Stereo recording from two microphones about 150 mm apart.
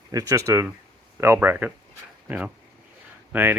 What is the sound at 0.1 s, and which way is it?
Speech, 25° right (ahead or behind).